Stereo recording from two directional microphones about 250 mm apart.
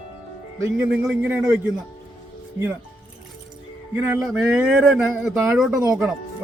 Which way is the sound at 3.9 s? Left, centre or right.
Centre.